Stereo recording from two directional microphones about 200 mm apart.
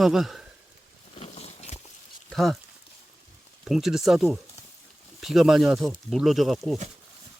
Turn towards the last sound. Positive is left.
turn(degrees=0)  # may be behind; listen again after turning